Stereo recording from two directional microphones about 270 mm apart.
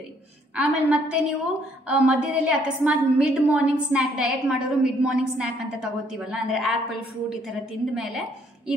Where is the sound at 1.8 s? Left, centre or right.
Centre.